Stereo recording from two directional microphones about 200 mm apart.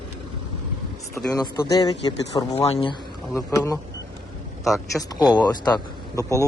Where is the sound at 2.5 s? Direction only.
30° left (ahead or behind).